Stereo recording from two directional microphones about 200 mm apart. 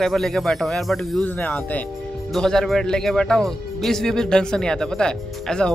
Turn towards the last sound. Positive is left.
turn(degrees=5)  # may be behind; listen again after turning